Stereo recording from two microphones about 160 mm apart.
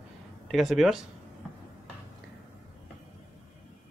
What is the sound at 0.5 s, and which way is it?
Speech, centre (ahead or behind).